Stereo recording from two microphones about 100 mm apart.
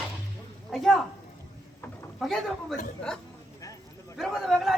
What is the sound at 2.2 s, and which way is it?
Speech, centre (ahead or behind).